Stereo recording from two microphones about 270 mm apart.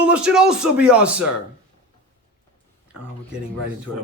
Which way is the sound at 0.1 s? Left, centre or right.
Centre.